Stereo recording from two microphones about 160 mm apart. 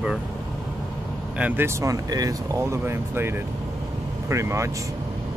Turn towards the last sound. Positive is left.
turn(degrees=-20)  # may be behind; listen again after turning